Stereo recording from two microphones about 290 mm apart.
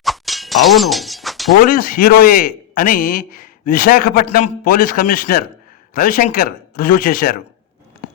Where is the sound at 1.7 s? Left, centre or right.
Left.